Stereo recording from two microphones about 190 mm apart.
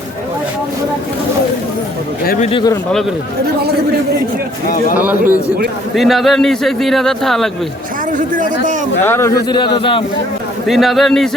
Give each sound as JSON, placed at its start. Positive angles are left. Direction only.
{"t": 2.2, "sound": "speech", "side_deg": 45}
{"t": 2.5, "sound": "a man's voice", "side_deg": 25}
{"t": 4.9, "sound": "a man's voice", "side_deg": -10}
{"t": 9.0, "sound": "a man's voice", "side_deg": 15}
{"t": 10.7, "sound": "a man's voice", "side_deg": 0}